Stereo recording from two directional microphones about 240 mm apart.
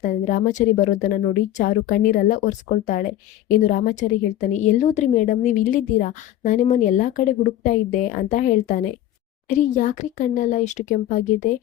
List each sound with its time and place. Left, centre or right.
0.0 s a woman's voice: left